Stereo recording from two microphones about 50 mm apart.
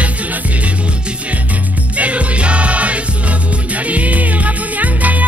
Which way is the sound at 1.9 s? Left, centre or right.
Right.